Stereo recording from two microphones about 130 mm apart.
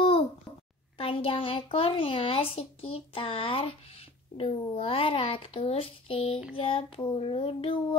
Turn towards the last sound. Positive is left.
turn(degrees=45)  # may be behind; listen again after turning